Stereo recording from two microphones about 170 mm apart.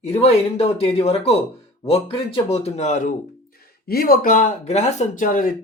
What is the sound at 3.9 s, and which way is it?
Speech, 60° left (ahead or behind).